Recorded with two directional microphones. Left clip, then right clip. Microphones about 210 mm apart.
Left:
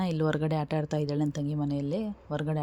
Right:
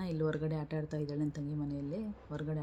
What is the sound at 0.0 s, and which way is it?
Speech, 40° left (ahead or behind).